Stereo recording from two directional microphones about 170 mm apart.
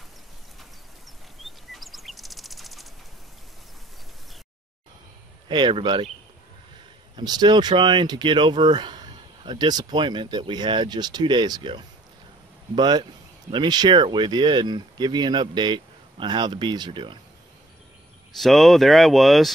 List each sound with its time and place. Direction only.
1.4 s bird flight: centre (ahead or behind)
5.5 s speech: 25° right (ahead or behind)
7.2 s speech: 25° right (ahead or behind)
18.3 s speech: centre (ahead or behind)